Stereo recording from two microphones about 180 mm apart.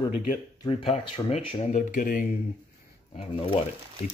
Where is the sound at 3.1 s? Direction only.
30° left (ahead or behind).